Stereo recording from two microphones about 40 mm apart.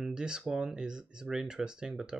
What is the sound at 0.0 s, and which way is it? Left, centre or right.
Speech, centre.